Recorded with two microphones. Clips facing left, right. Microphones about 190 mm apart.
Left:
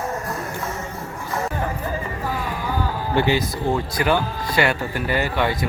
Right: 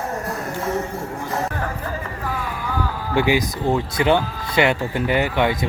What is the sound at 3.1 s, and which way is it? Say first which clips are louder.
Speech: right 2 dB; 10° right (ahead or behind).